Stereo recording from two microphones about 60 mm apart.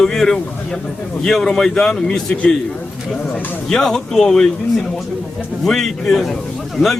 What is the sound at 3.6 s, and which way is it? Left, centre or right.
Speech, centre.